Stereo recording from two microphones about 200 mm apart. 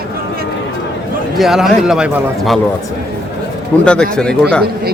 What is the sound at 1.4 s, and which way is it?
Speech, centre (ahead or behind).